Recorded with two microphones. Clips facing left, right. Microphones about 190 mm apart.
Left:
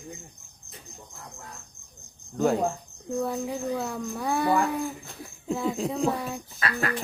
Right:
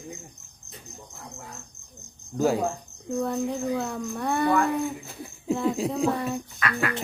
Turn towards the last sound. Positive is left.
turn(degrees=30)  # may be behind; listen again after turning